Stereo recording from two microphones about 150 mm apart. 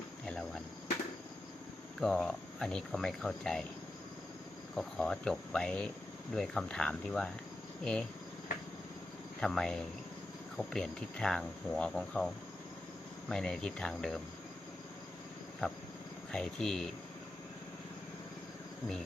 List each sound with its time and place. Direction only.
0.3 s cricket: 5° left (ahead or behind)
2.0 s speech: 5° left (ahead or behind)
4.7 s speech: 5° left (ahead or behind)
9.4 s speech: 5° left (ahead or behind)
16.3 s speech: 5° left (ahead or behind)